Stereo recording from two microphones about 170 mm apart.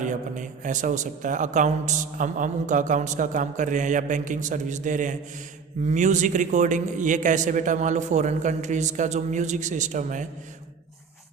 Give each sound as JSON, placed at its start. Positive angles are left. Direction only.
{"t": 0.0, "sound": "a man's voice", "side_deg": -45}